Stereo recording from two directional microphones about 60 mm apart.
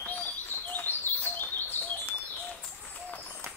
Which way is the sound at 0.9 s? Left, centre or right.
Left.